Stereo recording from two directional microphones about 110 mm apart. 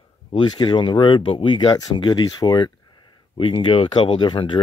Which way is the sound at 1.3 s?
60° left (ahead or behind).